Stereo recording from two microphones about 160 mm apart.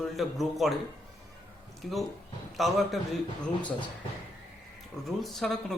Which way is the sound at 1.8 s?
Centre (ahead or behind).